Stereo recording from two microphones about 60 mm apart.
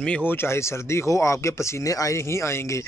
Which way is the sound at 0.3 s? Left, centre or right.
Left.